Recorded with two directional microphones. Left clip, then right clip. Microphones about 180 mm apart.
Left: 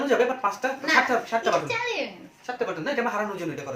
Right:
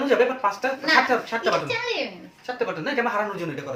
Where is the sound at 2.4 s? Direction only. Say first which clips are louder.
Right 1 dB; 10° left (ahead or behind).